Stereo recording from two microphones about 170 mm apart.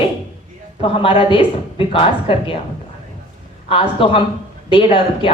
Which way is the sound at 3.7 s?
30° left (ahead or behind).